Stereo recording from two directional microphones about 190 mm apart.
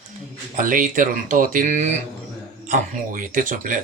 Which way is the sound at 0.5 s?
45° right (ahead or behind).